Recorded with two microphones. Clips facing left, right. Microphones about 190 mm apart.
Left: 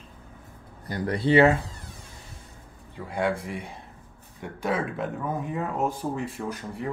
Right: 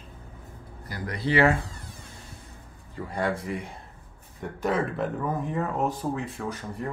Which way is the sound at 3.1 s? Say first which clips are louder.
Left 1 dB; centre (ahead or behind).